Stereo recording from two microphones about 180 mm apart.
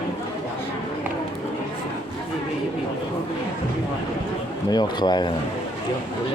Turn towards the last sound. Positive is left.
turn(degrees=25)  # may be behind; listen again after turning